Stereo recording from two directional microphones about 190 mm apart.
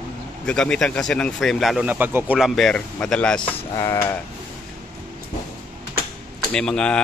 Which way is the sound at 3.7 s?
15° left (ahead or behind).